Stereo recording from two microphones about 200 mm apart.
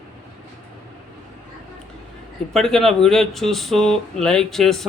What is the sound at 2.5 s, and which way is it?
Speech, centre (ahead or behind).